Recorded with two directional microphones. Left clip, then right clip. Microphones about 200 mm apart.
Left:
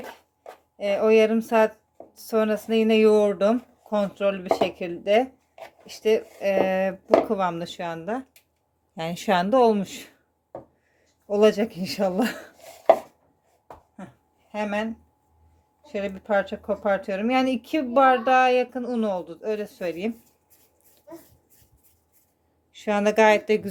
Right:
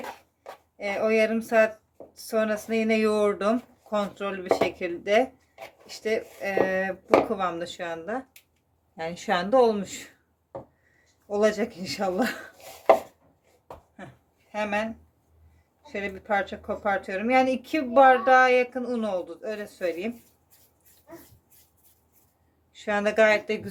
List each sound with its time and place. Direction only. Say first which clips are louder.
0.8 s speech: left 5 dB; 35° left (ahead or behind)
11.3 s speech: left 4 dB; 35° left (ahead or behind)
14.5 s speech: even; 30° left (ahead or behind)
22.7 s speech: left 3 dB; 35° left (ahead or behind)